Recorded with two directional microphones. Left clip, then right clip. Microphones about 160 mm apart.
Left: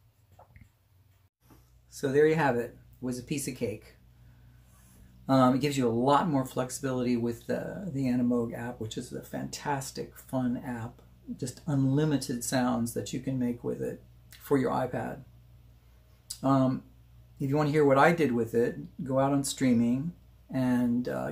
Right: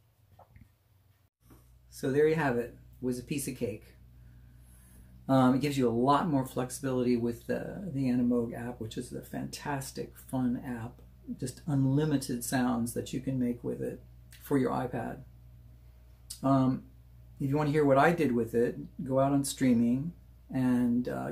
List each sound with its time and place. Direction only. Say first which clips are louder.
1.9 s speech: left 3 dB; 20° left (ahead or behind)
5.2 s speech: left 2 dB; 20° left (ahead or behind)
16.3 s speech: left 1 dB; 20° left (ahead or behind)